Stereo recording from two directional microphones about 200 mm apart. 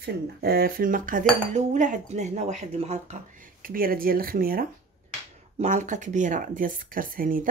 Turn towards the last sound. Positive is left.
turn(degrees=-45)  # may be behind; listen again after turning